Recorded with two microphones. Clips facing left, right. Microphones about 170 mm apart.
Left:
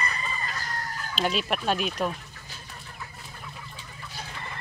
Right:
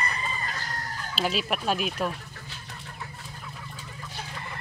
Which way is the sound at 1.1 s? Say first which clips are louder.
Left 1 dB; 5° right (ahead or behind).